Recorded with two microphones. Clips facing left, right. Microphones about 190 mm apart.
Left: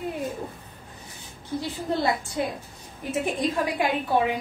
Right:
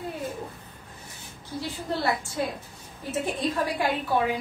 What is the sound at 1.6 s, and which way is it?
A woman's voice, 15° left (ahead or behind).